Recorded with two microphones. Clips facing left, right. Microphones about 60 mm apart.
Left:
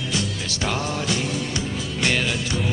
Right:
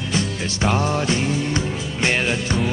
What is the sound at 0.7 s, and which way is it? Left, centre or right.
Music, right.